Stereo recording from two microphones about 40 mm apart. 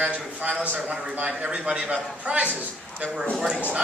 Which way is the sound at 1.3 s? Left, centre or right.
Right.